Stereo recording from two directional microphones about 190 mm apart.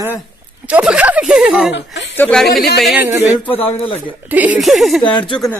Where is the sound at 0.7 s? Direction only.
5° right (ahead or behind); by 3.9 s 10° left (ahead or behind).